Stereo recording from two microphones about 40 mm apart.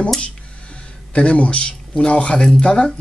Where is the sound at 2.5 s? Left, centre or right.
Left.